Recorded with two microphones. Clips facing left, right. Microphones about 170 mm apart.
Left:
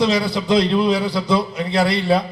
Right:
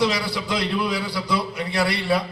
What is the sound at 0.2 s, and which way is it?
A man's voice, 25° left (ahead or behind).